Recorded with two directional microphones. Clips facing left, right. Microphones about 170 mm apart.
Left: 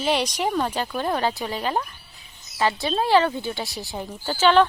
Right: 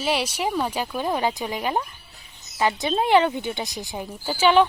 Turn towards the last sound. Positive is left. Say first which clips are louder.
# even
turn(degrees=-10)  # may be behind; listen again after turning